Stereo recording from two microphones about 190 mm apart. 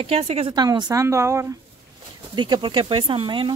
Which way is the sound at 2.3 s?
25° right (ahead or behind).